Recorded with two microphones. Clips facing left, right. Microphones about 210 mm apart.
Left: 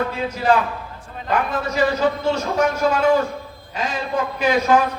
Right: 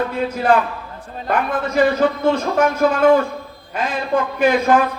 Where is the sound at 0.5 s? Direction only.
55° right (ahead or behind).